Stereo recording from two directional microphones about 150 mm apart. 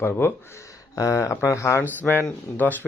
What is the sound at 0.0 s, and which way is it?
Speech, 15° left (ahead or behind).